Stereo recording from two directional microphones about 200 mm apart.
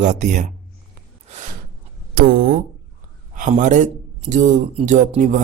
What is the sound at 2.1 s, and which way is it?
Speech, 45° right (ahead or behind).